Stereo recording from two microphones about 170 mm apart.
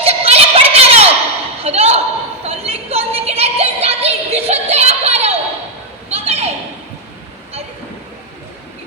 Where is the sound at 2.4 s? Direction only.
35° right (ahead or behind).